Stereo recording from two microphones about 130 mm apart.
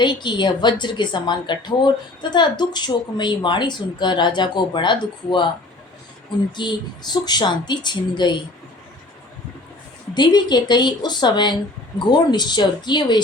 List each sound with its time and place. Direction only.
0.0 s speech: 35° left (ahead or behind)
6.6 s speech: 35° left (ahead or behind)
10.2 s speech: 35° left (ahead or behind)